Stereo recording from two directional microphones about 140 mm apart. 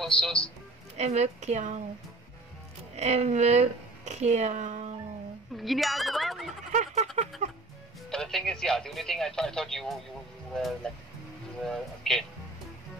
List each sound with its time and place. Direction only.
0.0 s speech: 5° left (ahead or behind)
0.9 s a woman's voice: 50° right (ahead or behind)
3.0 s a woman's voice: 50° right (ahead or behind)
5.6 s speech: centre (ahead or behind)
6.7 s a sound: 60° right (ahead or behind)
8.1 s speech: 5° left (ahead or behind)